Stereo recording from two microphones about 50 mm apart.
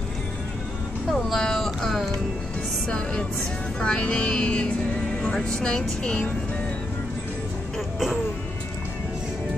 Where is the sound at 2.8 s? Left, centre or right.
Centre.